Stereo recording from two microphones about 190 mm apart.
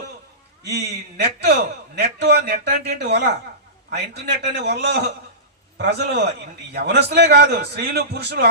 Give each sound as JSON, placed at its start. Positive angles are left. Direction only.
{"t": 1.1, "sound": "a man's voice", "side_deg": -60}